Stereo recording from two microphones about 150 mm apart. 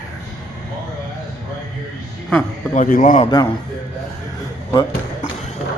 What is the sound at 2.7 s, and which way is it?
Speech, 60° left (ahead or behind).